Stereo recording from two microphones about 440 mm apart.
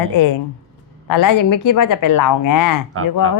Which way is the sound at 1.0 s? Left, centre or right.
Left.